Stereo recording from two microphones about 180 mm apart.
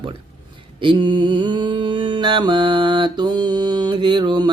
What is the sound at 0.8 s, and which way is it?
Mantra, 25° right (ahead or behind).